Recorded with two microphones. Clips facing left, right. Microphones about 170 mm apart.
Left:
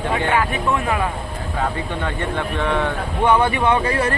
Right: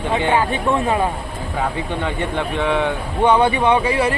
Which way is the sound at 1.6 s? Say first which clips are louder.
Right 1 dB; 15° right (ahead or behind).